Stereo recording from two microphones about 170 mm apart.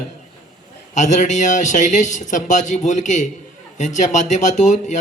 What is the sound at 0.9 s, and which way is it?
A man's voice, 45° left (ahead or behind).